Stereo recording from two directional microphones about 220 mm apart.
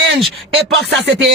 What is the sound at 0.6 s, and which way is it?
Rapping, 50° right (ahead or behind).